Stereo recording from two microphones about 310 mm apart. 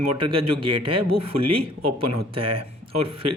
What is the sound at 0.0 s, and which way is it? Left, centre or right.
Speech, right.